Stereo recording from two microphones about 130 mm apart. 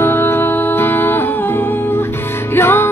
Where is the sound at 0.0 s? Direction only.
15° left (ahead or behind).